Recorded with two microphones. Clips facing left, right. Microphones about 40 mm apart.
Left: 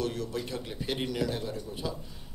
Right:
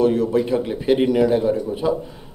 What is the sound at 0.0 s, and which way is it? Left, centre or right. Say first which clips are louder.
Speech: right 15 dB; right.